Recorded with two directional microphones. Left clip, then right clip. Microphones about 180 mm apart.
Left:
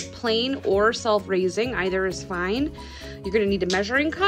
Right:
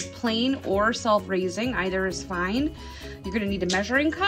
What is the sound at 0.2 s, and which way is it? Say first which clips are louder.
A woman's voice: left 3 dB; 50° left (ahead or behind).